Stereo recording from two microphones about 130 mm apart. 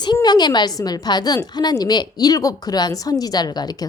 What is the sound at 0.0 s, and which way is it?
A woman's voice, 35° left (ahead or behind).